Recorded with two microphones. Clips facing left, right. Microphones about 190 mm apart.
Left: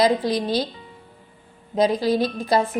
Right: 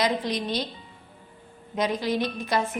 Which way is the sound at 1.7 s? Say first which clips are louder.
Left 6 dB; 35° left (ahead or behind).